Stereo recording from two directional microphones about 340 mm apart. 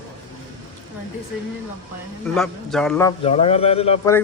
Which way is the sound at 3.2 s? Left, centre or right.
Centre.